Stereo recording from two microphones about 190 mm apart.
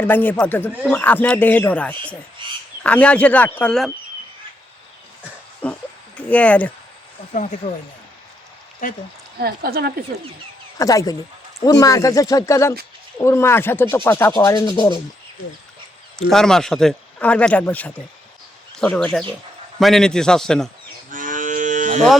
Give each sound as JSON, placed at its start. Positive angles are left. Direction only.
{"t": 0.0, "sound": "speech", "side_deg": 10}
{"t": 2.4, "sound": "frog", "side_deg": -25}
{"t": 2.8, "sound": "speech", "side_deg": 5}
{"t": 5.6, "sound": "speech", "side_deg": 5}
{"t": 7.6, "sound": "speech", "side_deg": 40}
{"t": 9.4, "sound": "speech", "side_deg": -55}
{"t": 10.8, "sound": "speech", "side_deg": 20}
{"t": 16.3, "sound": "speech", "side_deg": 5}
{"t": 21.1, "sound": "cattle", "side_deg": -45}